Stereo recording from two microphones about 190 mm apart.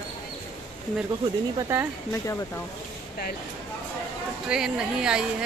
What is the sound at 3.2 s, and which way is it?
Speech, 55° left (ahead or behind).